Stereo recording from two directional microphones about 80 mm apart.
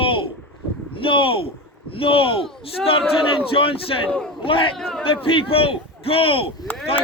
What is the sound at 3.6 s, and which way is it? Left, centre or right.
A man's voice, left.